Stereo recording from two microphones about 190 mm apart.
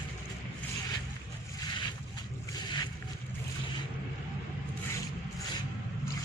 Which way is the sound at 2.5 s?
20° left (ahead or behind).